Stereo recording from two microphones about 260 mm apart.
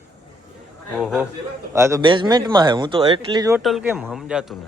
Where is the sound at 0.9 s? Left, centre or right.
Centre.